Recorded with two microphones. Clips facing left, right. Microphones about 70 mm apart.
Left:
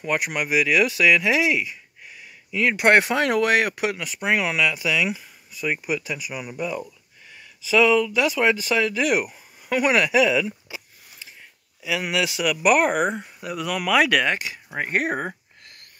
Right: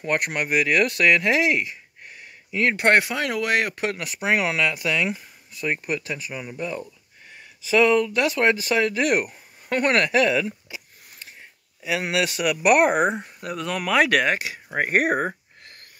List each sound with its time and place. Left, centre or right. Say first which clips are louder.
0.0 s speech: even; centre
3.0 s speech: left 4 dB; left
3.6 s speech: left 2 dB; centre
4.0 s speech: right 2 dB; centre
11.8 s speech: right 1 dB; centre
14.1 s speech: right 1 dB; centre